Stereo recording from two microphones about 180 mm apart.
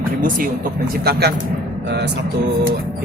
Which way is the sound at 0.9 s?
60° right (ahead or behind).